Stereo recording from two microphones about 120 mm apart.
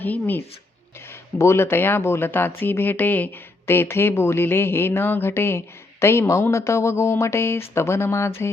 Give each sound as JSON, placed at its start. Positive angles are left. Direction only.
{"t": 0.0, "sound": "speech", "side_deg": 15}